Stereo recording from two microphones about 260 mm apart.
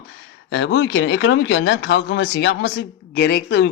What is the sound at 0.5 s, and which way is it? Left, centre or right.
Speech, left.